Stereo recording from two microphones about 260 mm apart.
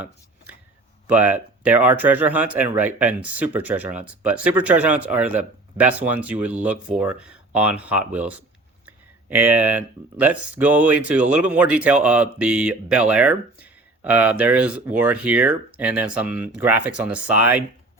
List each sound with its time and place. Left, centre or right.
1.1 s speech: centre